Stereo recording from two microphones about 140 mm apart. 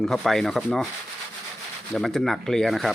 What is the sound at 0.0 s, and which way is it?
Speech, 5° left (ahead or behind).